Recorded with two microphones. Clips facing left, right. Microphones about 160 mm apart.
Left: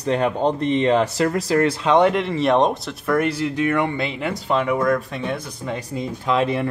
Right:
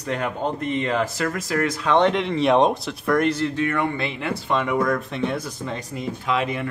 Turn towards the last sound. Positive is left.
turn(degrees=35)  # may be behind; listen again after turning